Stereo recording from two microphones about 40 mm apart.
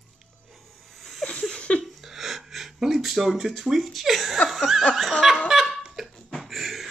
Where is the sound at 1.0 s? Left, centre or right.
Centre.